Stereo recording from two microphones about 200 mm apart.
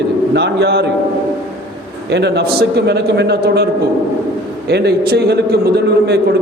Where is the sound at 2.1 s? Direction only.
60° right (ahead or behind).